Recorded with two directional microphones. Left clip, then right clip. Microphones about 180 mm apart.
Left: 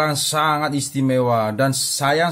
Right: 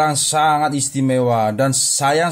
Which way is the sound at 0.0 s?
15° right (ahead or behind).